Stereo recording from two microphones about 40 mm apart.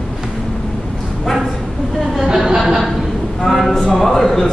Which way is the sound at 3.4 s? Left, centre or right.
Centre.